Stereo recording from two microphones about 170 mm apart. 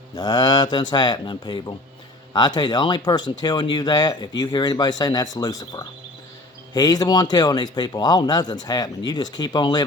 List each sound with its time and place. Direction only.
0.2 s speech: 25° left (ahead or behind)